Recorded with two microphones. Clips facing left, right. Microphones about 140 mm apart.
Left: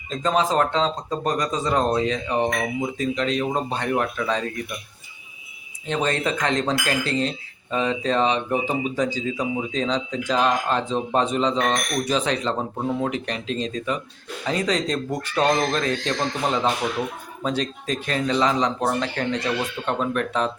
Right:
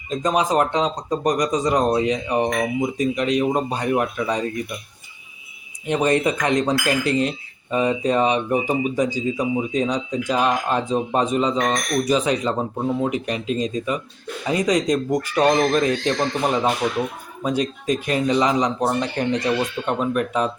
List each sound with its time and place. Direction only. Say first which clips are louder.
0.1 s speech: right 2 dB; 15° right (ahead or behind)
5.8 s speech: right 5 dB; 15° right (ahead or behind)